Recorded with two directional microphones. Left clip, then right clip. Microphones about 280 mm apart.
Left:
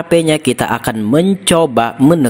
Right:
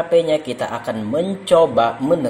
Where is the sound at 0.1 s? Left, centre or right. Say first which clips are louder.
Left 5 dB; left.